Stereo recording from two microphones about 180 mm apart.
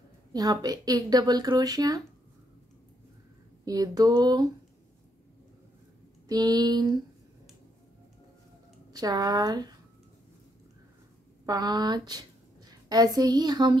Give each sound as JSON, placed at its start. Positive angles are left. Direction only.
{"t": 0.3, "sound": "speech", "side_deg": -20}
{"t": 3.6, "sound": "speech", "side_deg": -20}
{"t": 6.2, "sound": "speech", "side_deg": -20}
{"t": 8.9, "sound": "speech", "side_deg": -20}
{"t": 11.4, "sound": "speech", "side_deg": -20}